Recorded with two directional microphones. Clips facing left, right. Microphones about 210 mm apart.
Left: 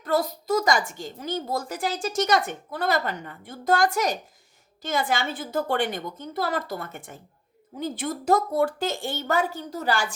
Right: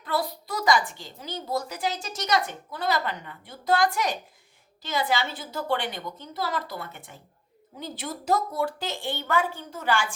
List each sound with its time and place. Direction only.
0.0 s speech: 45° left (ahead or behind)